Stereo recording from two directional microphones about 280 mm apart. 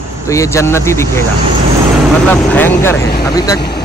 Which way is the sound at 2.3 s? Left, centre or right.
Centre.